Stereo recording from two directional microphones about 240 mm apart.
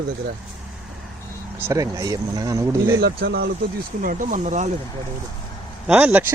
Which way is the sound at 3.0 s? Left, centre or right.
Right.